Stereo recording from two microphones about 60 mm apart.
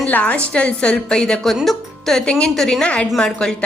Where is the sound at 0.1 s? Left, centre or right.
Left; by 2.2 s centre.